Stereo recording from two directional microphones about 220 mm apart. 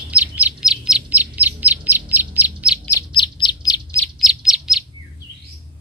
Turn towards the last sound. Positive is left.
turn(degrees=0)  # may be behind; listen again after turning